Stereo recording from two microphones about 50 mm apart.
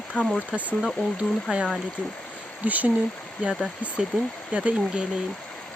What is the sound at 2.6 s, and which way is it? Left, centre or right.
Speech, right.